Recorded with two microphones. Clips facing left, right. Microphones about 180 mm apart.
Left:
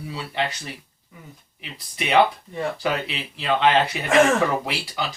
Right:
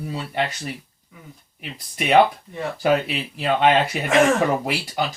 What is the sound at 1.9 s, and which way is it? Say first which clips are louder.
Speech: right 3 dB; 50° right (ahead or behind).